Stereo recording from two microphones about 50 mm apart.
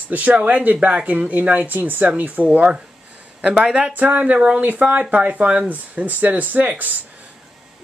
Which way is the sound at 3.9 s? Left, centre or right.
Right.